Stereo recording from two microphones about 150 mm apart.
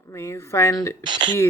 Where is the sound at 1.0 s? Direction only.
30° right (ahead or behind).